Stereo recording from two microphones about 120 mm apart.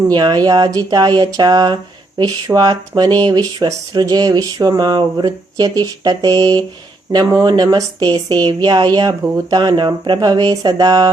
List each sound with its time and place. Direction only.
0.1 s speech: 40° right (ahead or behind)